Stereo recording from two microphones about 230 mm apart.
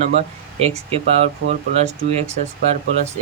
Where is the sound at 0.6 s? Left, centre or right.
Right.